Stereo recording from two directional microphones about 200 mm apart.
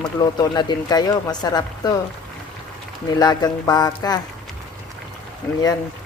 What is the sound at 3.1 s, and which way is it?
Speech, 20° left (ahead or behind).